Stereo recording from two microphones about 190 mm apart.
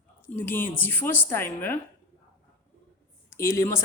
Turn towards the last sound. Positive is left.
turn(degrees=15)  # may be behind; listen again after turning